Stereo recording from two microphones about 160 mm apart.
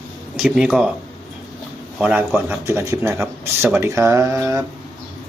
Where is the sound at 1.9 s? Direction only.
10° right (ahead or behind).